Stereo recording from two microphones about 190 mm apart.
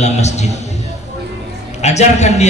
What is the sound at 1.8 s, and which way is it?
Speech, 35° left (ahead or behind).